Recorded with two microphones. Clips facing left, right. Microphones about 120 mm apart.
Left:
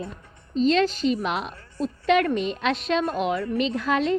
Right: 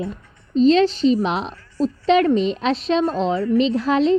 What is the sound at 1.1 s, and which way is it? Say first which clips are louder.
A woman's voice: right 6 dB; 35° right (ahead or behind).